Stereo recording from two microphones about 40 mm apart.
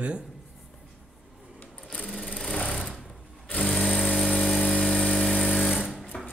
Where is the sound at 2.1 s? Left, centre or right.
Centre.